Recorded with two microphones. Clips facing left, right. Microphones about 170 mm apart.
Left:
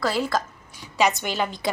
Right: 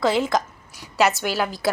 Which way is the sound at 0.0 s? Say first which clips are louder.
Right 4 dB; 20° right (ahead or behind).